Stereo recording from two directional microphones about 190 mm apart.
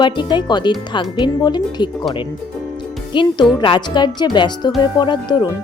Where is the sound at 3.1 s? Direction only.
25° left (ahead or behind).